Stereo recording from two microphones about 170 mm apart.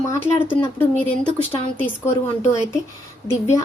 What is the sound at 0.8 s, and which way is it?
Speech, 10° left (ahead or behind).